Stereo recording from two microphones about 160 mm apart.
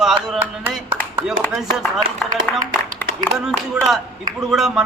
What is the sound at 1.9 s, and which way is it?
Speech, 25° right (ahead or behind).